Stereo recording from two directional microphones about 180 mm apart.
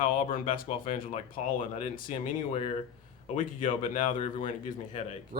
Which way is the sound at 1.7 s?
35° left (ahead or behind).